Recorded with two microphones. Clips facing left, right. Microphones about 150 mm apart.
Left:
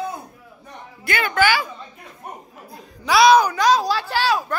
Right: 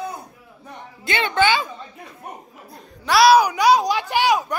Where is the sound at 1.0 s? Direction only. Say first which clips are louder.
Even; 25° right (ahead or behind).